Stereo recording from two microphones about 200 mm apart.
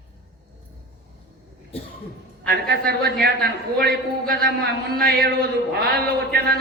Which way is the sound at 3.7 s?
50° right (ahead or behind).